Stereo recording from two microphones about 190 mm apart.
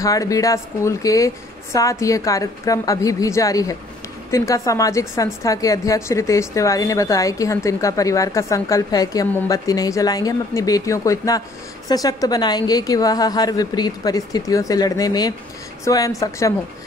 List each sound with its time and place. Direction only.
0.0 s a woman's voice: 15° left (ahead or behind)